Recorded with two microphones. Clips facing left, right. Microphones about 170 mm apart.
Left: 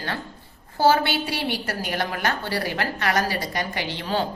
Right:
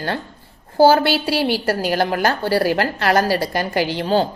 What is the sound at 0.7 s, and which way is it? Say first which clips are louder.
Speech: right 6 dB; 30° right (ahead or behind).